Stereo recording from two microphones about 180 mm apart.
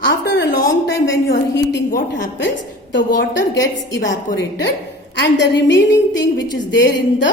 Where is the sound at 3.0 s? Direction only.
50° left (ahead or behind).